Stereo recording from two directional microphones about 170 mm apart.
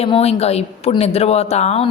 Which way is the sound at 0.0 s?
35° left (ahead or behind).